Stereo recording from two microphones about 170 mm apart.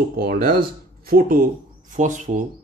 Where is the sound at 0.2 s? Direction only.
55° right (ahead or behind).